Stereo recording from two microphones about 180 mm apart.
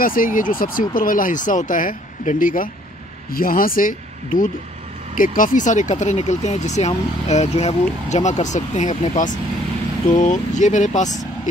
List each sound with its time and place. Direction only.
0.0 s speech: 50° left (ahead or behind)